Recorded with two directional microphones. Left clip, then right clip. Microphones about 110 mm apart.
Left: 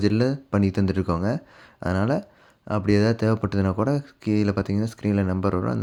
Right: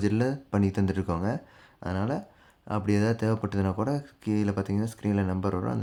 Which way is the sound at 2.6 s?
30° left (ahead or behind).